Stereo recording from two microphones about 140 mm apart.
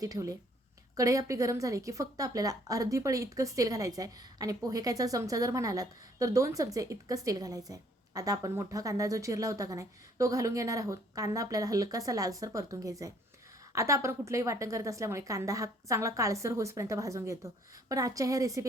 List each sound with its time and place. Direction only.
0.0 s a woman's voice: 25° right (ahead or behind)